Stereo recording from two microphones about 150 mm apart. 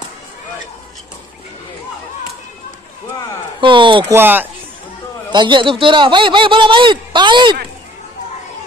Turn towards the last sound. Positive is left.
turn(degrees=-30)  # may be behind; listen again after turning